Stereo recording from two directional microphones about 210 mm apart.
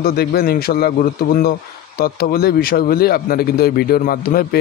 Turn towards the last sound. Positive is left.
turn(degrees=45)  # may be behind; listen again after turning